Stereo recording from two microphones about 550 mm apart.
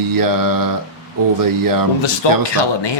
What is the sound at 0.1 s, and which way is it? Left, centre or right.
Speech, right.